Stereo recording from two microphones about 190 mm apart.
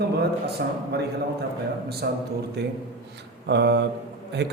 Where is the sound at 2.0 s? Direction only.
55° right (ahead or behind).